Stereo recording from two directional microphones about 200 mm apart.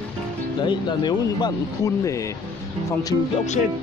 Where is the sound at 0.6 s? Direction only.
20° left (ahead or behind).